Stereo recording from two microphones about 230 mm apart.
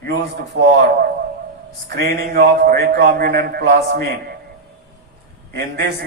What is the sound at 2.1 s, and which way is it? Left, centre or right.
A man's voice, right.